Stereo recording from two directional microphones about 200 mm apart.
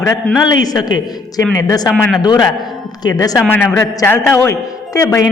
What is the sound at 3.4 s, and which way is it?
A man's voice, 5° left (ahead or behind).